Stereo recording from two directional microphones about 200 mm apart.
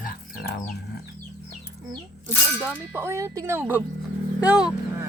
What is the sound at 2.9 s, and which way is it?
Speech, 15° right (ahead or behind).